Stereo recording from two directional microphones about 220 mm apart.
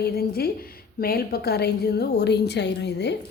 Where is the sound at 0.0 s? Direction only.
45° left (ahead or behind).